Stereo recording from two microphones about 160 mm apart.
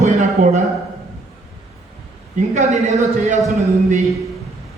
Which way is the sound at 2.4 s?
50° right (ahead or behind).